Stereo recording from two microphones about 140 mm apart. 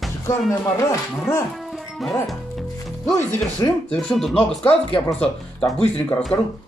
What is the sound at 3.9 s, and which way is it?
Speech, 5° left (ahead or behind).